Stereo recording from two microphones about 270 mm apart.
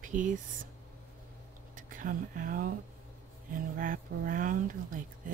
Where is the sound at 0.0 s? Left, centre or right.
Right.